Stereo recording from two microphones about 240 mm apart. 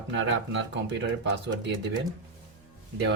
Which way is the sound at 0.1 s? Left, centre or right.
Right.